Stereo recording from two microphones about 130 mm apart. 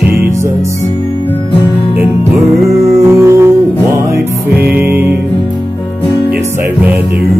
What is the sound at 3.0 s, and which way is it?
Music, 25° right (ahead or behind).